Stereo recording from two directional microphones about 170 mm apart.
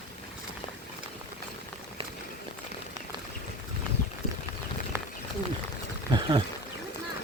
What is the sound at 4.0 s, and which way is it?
Clip-clop, 55° left (ahead or behind).